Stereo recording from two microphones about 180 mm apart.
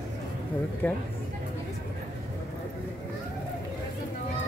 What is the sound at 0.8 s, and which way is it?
Speech, 10° left (ahead or behind).